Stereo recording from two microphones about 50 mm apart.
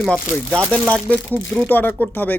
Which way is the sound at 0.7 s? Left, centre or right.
Left.